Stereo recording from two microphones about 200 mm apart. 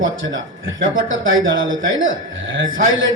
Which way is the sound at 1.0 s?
75° right (ahead or behind).